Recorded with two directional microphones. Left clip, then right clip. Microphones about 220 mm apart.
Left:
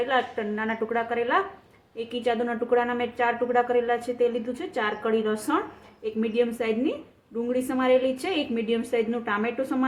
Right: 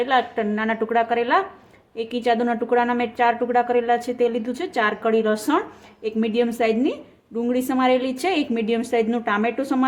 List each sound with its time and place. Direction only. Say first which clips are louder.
0.0 s a woman's voice: right 5 dB; 40° right (ahead or behind)